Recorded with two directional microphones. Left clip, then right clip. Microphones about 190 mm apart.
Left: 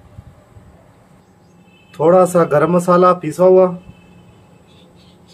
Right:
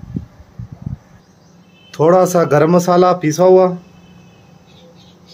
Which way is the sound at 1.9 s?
45° right (ahead or behind).